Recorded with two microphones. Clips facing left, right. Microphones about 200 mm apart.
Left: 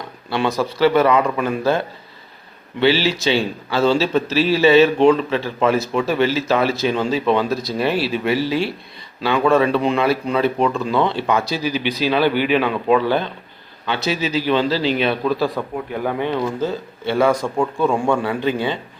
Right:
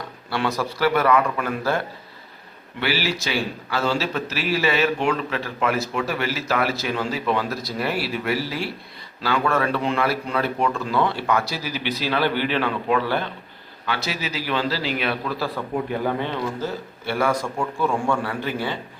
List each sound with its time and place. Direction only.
0.3 s a man's voice: 20° left (ahead or behind)
2.8 s a man's voice: 25° left (ahead or behind)